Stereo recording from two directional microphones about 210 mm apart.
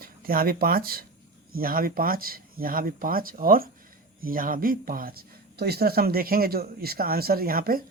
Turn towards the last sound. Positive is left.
turn(degrees=-45)  # may be behind; listen again after turning